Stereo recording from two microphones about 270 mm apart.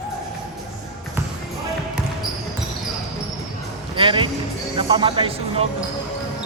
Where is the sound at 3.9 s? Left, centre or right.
Centre.